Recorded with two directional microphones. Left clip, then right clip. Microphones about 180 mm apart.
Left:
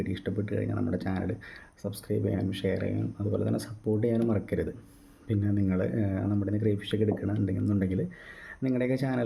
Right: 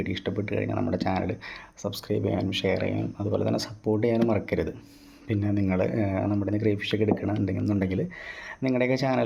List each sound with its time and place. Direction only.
0.0 s speech: 20° left (ahead or behind)